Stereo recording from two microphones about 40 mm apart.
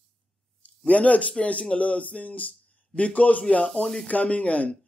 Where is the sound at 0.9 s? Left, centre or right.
Left.